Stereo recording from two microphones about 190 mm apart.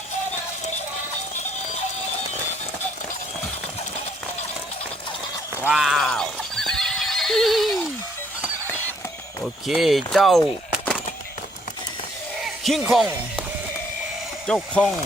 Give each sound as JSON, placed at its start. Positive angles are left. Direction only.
{"t": 5.5, "sound": "neigh", "side_deg": -5}
{"t": 9.6, "sound": "speech", "side_deg": 0}
{"t": 12.4, "sound": "a sound", "side_deg": 0}
{"t": 14.4, "sound": "speech", "side_deg": 5}